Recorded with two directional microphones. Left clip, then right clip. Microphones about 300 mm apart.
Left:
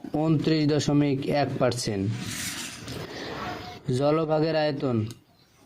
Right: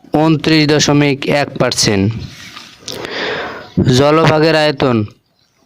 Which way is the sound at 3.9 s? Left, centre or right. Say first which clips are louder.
Right 13 dB; right.